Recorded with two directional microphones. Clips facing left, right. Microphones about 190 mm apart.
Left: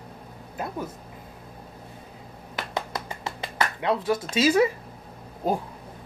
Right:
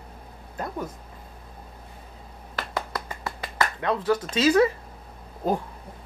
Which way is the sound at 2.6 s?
20° left (ahead or behind).